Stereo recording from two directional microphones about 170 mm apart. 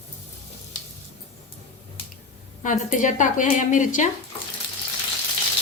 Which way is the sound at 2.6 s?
50° left (ahead or behind).